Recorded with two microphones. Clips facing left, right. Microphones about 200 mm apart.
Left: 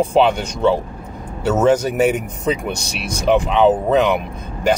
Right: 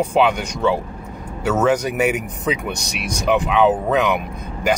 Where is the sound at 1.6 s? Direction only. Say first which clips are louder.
Left 4 dB; 10° right (ahead or behind).